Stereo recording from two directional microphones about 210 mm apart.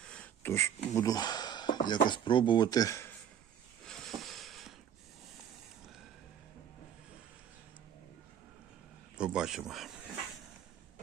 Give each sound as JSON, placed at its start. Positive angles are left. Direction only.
{"t": 0.0, "sound": "speech", "side_deg": 5}
{"t": 3.8, "sound": "a sound", "side_deg": 0}
{"t": 9.1, "sound": "speech", "side_deg": -5}